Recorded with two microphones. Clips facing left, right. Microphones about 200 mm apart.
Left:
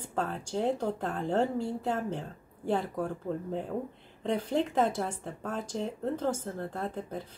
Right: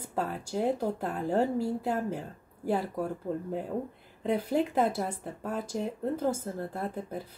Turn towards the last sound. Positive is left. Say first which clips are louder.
# right 1 dB
turn(degrees=-10)  # may be behind; listen again after turning